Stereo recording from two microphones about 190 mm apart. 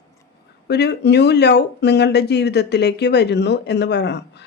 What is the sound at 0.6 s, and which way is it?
Speech, 60° left (ahead or behind).